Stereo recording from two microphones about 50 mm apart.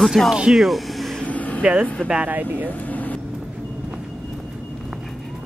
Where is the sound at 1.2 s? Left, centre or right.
Left.